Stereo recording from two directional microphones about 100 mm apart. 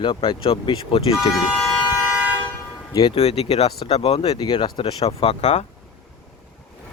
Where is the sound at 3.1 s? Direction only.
90° left.